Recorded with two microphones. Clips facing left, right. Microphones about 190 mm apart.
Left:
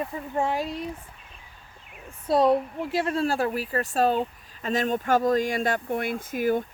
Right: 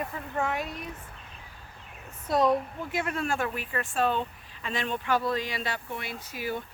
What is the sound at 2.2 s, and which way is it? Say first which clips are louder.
A woman's voice: left 4 dB; 30° left (ahead or behind).